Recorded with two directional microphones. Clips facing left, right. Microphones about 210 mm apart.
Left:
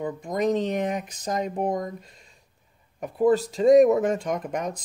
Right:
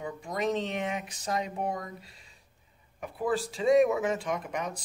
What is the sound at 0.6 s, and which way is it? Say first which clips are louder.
Speech: left 6 dB; 40° left (ahead or behind).